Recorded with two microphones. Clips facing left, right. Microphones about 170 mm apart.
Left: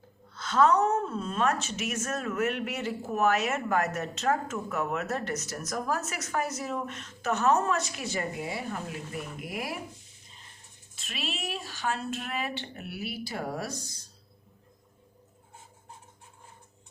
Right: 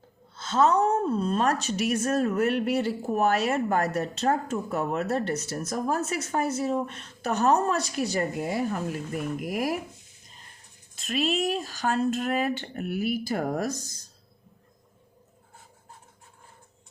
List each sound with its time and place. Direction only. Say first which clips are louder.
0.3 s a woman's voice: right 1 dB; 25° right (ahead or behind); by 9.7 s 45° right (ahead or behind)
10.9 s speech: right 11 dB; 40° right (ahead or behind)